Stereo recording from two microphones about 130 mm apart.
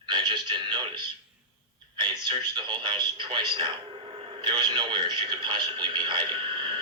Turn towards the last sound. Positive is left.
turn(degrees=-35)  # may be behind; listen again after turning